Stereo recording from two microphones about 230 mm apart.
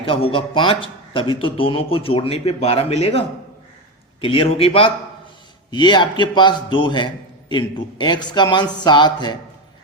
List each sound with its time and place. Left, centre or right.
0.0 s a man's voice: left